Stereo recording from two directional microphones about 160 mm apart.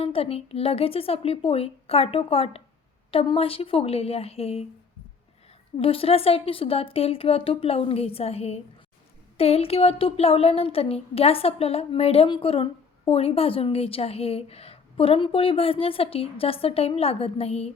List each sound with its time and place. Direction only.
0.0 s a woman's voice: 40° left (ahead or behind)
5.7 s a woman's voice: 35° left (ahead or behind)